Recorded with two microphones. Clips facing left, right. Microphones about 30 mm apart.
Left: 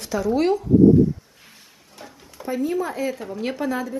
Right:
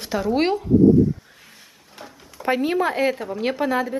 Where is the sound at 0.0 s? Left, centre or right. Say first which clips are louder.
Even; right.